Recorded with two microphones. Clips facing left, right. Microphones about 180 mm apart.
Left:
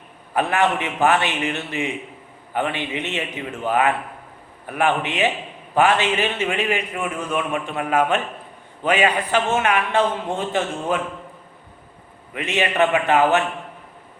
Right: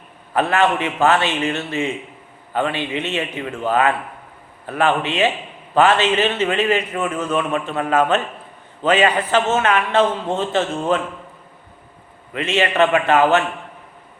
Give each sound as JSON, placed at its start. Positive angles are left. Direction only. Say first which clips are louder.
{"t": 0.3, "sound": "a man's voice", "louder": "right 2 dB", "side_deg": 15}
{"t": 12.3, "sound": "a man's voice", "louder": "right 3 dB", "side_deg": 15}